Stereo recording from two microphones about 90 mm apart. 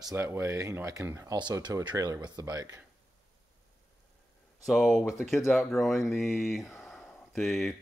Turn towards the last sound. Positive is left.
turn(degrees=0)  # may be behind; listen again after turning